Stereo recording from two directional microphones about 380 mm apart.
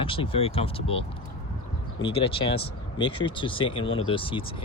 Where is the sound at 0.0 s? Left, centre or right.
Centre.